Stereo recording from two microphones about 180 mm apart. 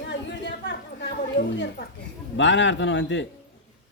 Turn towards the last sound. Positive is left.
turn(degrees=90)